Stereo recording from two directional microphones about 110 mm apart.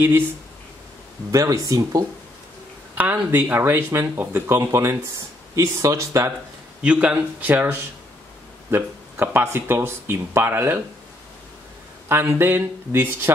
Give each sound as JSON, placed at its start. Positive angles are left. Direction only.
{"t": 1.3, "sound": "speech", "side_deg": -30}
{"t": 3.0, "sound": "a man's voice", "side_deg": -15}
{"t": 6.8, "sound": "a man's voice", "side_deg": -10}
{"t": 12.1, "sound": "speech", "side_deg": -20}